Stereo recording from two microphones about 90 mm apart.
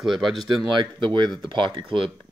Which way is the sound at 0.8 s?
60° right (ahead or behind).